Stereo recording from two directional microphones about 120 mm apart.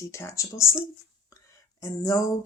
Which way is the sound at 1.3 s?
25° left (ahead or behind).